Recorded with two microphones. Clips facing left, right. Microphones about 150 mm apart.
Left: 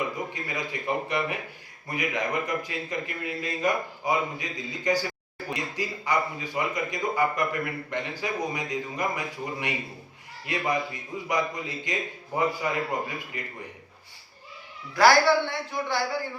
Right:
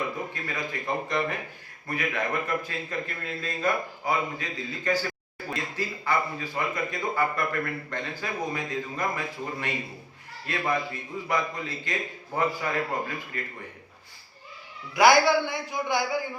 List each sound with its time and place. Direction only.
0.3 s a man's voice: 15° left (ahead or behind)
14.9 s a man's voice: 15° right (ahead or behind)